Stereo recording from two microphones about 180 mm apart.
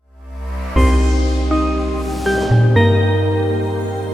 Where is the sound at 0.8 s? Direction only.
Centre (ahead or behind).